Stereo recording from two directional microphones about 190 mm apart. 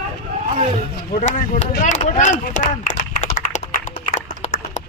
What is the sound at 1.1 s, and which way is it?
Speech, 40° left (ahead or behind).